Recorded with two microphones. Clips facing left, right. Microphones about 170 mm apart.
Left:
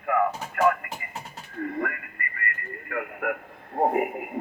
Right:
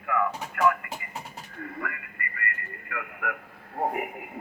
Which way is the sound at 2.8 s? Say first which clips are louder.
Left 5 dB; 35° left (ahead or behind).